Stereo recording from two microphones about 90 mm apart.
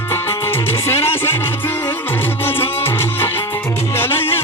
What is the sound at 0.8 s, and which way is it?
Music, 25° left (ahead or behind).